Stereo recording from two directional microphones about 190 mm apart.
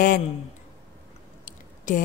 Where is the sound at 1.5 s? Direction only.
45° left (ahead or behind).